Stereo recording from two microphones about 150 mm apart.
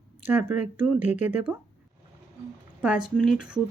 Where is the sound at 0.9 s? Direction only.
50° left (ahead or behind).